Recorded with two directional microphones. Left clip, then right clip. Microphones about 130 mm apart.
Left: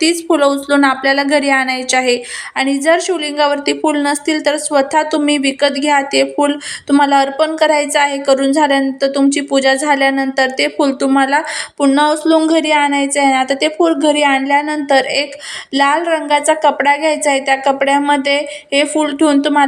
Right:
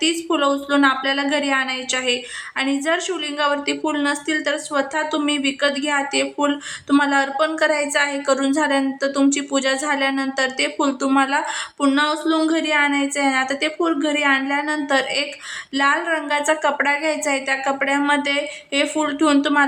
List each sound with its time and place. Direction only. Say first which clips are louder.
0.0 s a woman's voice: left 7 dB; 35° left (ahead or behind); by 19.6 s 15° left (ahead or behind)